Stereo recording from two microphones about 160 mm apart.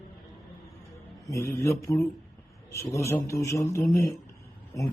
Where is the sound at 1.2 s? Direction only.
20° left (ahead or behind).